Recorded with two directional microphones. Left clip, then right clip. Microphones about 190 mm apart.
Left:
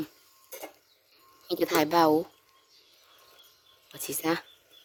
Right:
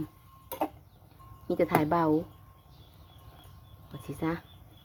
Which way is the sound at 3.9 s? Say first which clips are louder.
Left 4 dB; 65° left (ahead or behind).